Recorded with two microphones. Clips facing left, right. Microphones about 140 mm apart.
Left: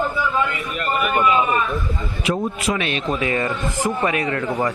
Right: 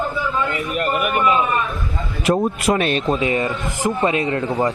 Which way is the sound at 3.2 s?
20° right (ahead or behind).